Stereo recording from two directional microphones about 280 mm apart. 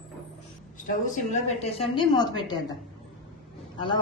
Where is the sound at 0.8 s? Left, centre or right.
Left.